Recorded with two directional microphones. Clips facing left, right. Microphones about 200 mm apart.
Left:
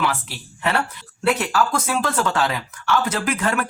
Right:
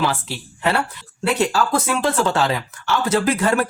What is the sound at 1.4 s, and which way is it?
Speech, 30° right (ahead or behind).